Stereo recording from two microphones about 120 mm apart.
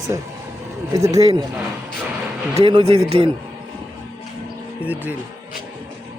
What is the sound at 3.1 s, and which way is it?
Speech, 50° right (ahead or behind).